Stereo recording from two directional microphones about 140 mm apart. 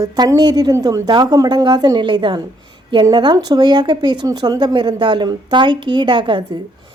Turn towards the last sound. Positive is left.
turn(degrees=-35)  # may be behind; listen again after turning